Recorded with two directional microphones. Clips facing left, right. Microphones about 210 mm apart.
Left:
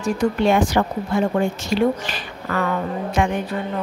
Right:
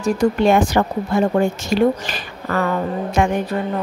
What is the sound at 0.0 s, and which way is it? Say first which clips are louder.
A woman's voice: right 3 dB; 45° right (ahead or behind).